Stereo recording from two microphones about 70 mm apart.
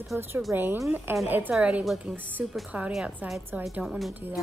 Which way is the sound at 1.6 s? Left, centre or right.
Centre.